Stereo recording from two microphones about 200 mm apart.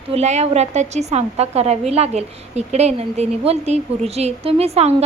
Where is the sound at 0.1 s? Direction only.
35° right (ahead or behind).